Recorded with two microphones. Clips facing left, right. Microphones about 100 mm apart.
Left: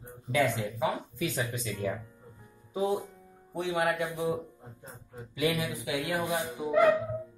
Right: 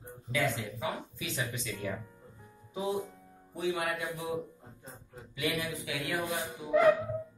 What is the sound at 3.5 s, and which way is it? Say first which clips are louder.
Speech: left 4 dB; 60° left (ahead or behind).